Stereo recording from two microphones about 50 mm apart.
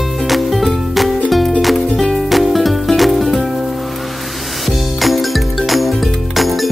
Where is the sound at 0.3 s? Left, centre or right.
Centre.